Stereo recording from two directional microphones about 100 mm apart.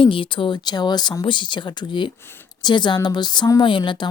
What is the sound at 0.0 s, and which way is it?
Speech, 60° left (ahead or behind).